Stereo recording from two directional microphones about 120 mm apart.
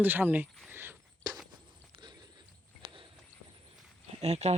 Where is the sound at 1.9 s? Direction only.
40° right (ahead or behind).